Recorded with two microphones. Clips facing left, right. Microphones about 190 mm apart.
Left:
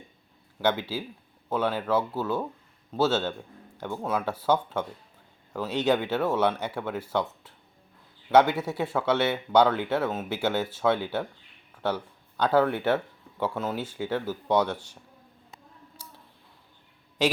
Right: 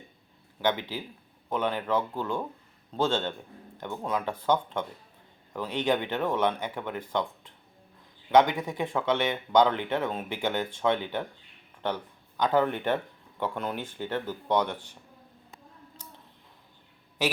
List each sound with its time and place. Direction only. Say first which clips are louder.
0.6 s speech: left 2 dB; 10° left (ahead or behind)
12.4 s speech: left 2 dB; 10° left (ahead or behind)
16.0 s a sound: even; 10° left (ahead or behind)